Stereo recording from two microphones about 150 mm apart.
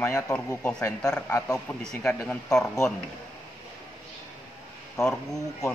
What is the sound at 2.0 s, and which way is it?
Speech, 5° left (ahead or behind).